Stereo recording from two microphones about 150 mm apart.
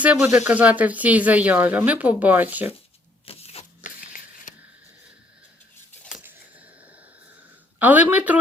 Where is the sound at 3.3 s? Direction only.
45° left (ahead or behind).